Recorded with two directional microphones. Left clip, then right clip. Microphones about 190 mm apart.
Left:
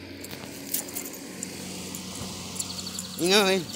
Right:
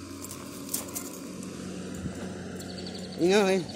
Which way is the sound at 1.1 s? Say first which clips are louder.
Left 2 dB; 45° right (ahead or behind).